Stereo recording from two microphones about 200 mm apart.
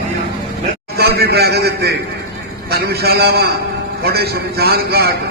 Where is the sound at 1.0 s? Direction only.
50° right (ahead or behind).